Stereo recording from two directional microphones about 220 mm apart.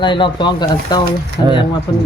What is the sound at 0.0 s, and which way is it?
Speech, 20° left (ahead or behind).